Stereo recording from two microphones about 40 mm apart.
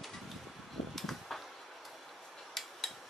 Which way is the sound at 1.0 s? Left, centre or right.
Centre.